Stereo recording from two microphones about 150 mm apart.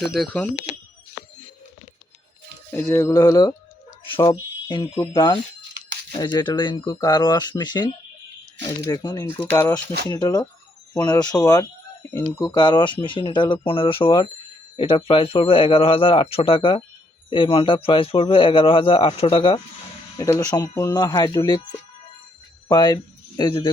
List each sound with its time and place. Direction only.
0.2 s speech: 10° left (ahead or behind)
2.9 s speech: 20° left (ahead or behind)
9.2 s speech: 15° left (ahead or behind); by 19.5 s 40° left (ahead or behind)
20.1 s speech: 25° left (ahead or behind)